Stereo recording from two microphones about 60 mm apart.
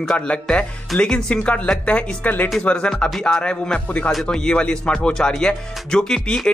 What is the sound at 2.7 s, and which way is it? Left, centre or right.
Speech, centre.